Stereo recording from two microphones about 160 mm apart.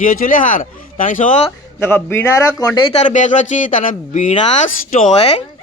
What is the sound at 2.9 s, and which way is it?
A man's voice, 50° left (ahead or behind).